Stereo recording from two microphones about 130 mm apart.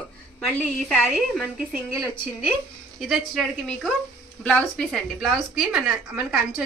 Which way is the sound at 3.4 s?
5° left (ahead or behind).